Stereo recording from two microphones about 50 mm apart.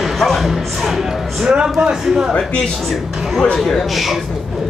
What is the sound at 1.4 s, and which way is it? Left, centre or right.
Speech, right.